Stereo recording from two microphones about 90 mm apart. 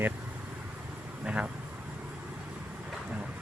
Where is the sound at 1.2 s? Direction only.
10° right (ahead or behind).